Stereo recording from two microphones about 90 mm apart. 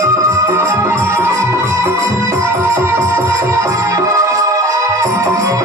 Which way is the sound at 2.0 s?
15° left (ahead or behind).